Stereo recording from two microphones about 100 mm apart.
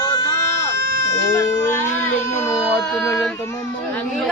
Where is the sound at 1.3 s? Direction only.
30° left (ahead or behind).